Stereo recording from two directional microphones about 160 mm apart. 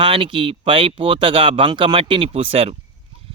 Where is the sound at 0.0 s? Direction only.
30° right (ahead or behind).